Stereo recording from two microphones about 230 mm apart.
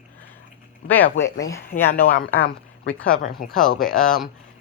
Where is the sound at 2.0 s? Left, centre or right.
Left.